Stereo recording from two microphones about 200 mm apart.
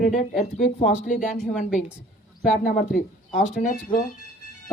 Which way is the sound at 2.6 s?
45° left (ahead or behind).